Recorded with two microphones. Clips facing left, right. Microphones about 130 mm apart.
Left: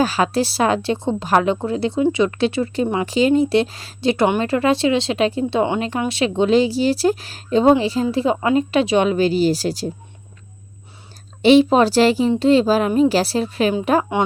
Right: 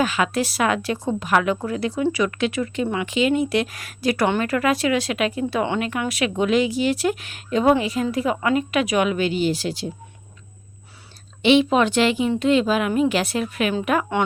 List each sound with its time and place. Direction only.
0.0 s a woman's voice: 35° left (ahead or behind)
11.4 s speech: 35° left (ahead or behind)
14.2 s speech: 15° left (ahead or behind)